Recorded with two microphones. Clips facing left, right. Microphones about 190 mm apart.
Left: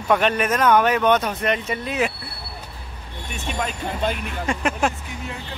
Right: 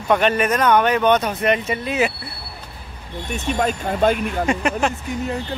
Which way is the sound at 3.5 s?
45° right (ahead or behind).